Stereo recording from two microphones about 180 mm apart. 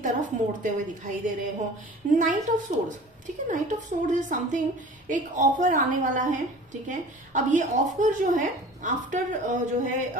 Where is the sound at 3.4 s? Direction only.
45° right (ahead or behind).